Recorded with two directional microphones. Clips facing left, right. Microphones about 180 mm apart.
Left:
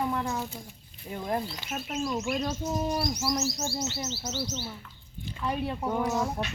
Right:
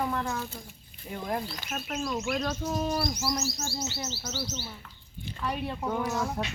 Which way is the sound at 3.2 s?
20° left (ahead or behind).